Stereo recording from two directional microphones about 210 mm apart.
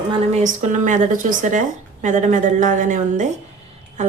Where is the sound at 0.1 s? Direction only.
30° right (ahead or behind).